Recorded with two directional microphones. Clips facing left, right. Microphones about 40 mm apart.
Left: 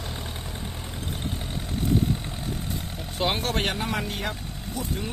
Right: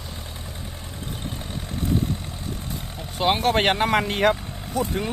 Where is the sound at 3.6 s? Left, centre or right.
Right.